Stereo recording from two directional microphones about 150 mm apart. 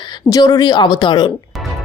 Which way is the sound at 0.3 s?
25° left (ahead or behind).